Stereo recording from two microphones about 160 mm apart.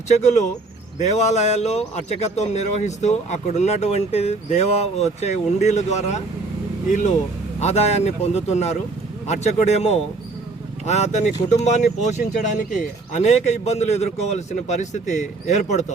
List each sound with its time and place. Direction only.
0.1 s a man's voice: 45° left (ahead or behind)